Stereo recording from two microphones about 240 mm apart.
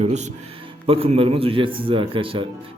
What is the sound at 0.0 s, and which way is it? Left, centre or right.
A man's voice, right.